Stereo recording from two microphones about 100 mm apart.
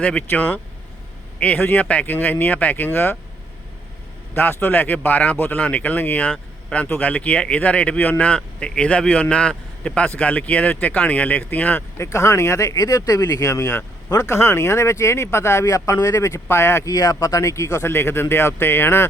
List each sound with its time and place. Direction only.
0.0 s a man's voice: 15° left (ahead or behind)
4.4 s a man's voice: 20° left (ahead or behind)
12.0 s speech: 30° left (ahead or behind)